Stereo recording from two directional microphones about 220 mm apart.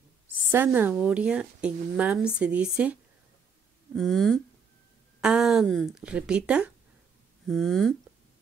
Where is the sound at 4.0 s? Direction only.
Centre (ahead or behind).